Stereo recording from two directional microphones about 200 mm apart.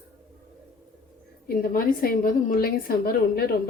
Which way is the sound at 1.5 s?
45° left (ahead or behind).